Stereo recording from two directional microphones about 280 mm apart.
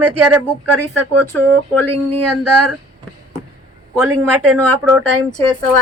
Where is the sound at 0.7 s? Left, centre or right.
Right.